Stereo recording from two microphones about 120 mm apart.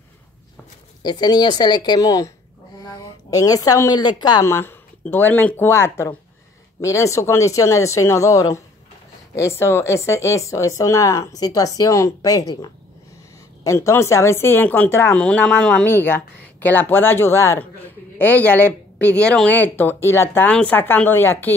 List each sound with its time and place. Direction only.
1.0 s a woman's voice: 35° left (ahead or behind)
4.5 s a woman's voice: 20° left (ahead or behind)
15.9 s a woman's voice: 15° left (ahead or behind)